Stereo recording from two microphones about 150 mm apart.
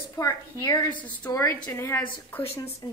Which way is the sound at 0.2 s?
20° left (ahead or behind).